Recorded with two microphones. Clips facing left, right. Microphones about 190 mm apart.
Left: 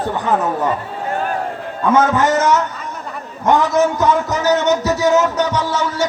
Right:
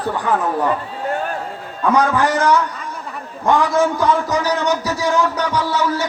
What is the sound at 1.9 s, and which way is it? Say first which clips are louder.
A man's voice: left 2 dB; 20° left (ahead or behind).